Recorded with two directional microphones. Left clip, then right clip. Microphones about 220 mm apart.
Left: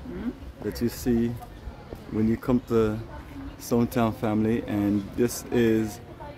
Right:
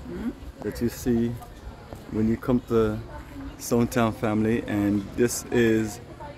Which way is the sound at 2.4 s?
Centre (ahead or behind).